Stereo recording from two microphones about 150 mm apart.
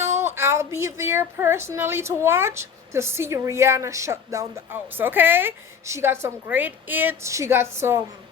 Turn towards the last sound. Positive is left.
turn(degrees=-15)  # may be behind; listen again after turning